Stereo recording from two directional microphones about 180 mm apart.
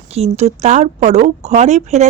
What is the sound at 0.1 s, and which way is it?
Speech, 35° right (ahead or behind).